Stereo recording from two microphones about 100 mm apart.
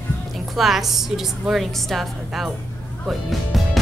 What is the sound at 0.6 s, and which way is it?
A woman's voice, centre (ahead or behind).